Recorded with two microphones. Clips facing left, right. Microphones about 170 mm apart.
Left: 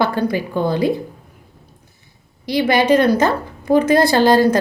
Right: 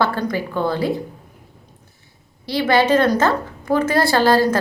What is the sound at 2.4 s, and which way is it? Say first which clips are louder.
A woman's voice: left 2 dB; 15° left (ahead or behind).